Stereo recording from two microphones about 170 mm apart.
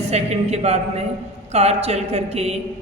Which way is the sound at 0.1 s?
40° right (ahead or behind).